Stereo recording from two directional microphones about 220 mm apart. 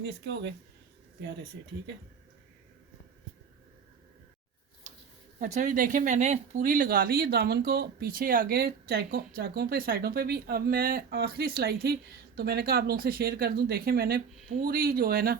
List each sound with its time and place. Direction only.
0.0 s speech: 55° right (ahead or behind)
4.9 s a sound: 35° right (ahead or behind)
5.4 s speech: 35° right (ahead or behind)